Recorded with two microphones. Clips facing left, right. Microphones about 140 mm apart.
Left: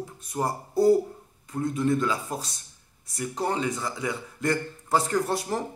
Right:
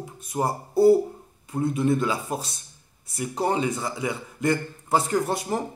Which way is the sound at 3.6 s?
25° right (ahead or behind).